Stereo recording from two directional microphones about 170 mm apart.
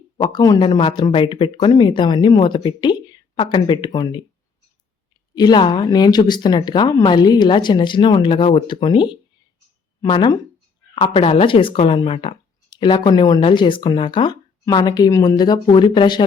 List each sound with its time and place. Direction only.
0.2 s speech: 25° left (ahead or behind)
5.3 s speech: 25° left (ahead or behind)